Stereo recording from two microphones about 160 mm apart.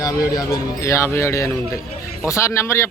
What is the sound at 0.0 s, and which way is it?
Speech, 20° left (ahead or behind).